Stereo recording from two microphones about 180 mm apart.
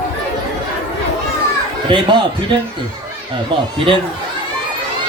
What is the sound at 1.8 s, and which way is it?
Speech, 25° right (ahead or behind).